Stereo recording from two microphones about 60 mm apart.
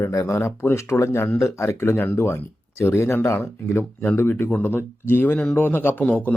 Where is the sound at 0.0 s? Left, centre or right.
Left.